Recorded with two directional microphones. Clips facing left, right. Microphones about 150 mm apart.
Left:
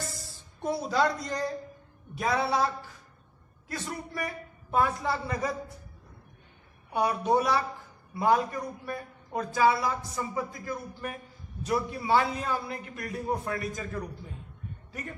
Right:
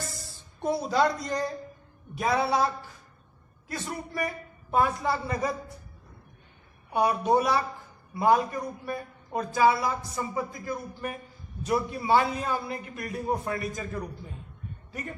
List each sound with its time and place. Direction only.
0.6 s a woman's voice: 20° right (ahead or behind)
6.9 s a man's voice: 15° right (ahead or behind)